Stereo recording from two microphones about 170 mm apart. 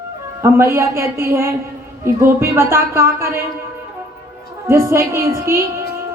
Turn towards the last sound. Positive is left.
turn(degrees=-15)  # may be behind; listen again after turning